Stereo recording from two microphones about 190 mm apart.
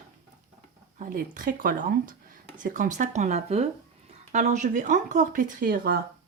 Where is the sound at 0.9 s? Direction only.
45° right (ahead or behind).